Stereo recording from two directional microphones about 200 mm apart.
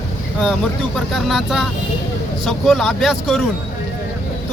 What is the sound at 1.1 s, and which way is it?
Speech, centre (ahead or behind).